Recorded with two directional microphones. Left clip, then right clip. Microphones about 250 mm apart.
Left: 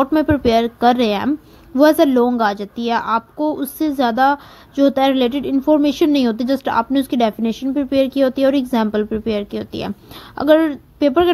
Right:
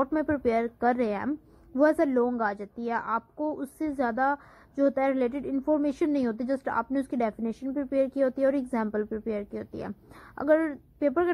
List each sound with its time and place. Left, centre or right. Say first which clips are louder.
0.0 s a woman's voice: left 11 dB; left